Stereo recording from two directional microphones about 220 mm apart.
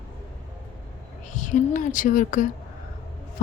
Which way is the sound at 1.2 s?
35° left (ahead or behind).